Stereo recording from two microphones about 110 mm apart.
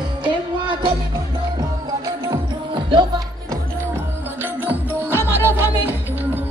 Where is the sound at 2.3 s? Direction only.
45° right (ahead or behind).